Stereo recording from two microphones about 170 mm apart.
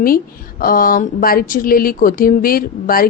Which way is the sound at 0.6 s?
55° left (ahead or behind).